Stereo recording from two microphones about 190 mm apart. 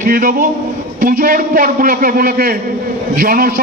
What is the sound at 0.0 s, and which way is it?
A man's voice, 50° right (ahead or behind).